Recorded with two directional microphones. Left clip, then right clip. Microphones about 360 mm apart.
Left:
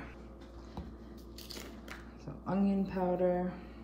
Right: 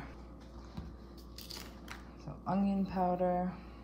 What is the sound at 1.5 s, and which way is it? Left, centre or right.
Scissors, centre.